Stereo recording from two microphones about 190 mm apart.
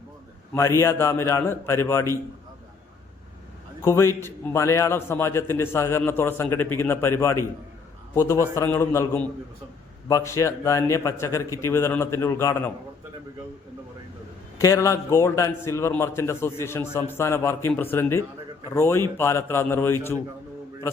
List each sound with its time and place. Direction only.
0.5 s a man's voice: 15° left (ahead or behind)
3.8 s a man's voice: 15° left (ahead or behind)
14.6 s a man's voice: 15° left (ahead or behind)